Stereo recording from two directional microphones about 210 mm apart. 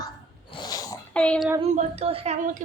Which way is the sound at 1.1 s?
5° left (ahead or behind).